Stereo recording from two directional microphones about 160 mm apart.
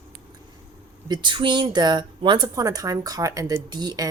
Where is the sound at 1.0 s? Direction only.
30° right (ahead or behind).